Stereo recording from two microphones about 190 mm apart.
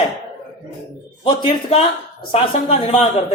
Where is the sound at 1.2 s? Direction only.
30° left (ahead or behind).